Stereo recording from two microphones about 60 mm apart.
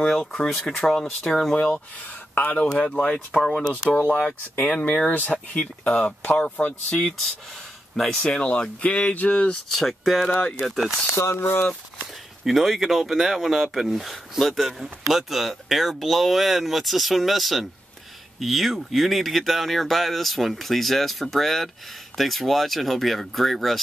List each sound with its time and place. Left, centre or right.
0.0 s speech: centre
1.6 s speech: left
2.5 s speech: centre
4.7 s speech: centre
6.9 s speech: centre
9.7 s speech: centre
11.1 s speech: left
12.4 s speech: centre